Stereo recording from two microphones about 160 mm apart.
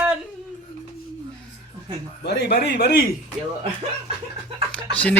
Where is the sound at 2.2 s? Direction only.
90° left.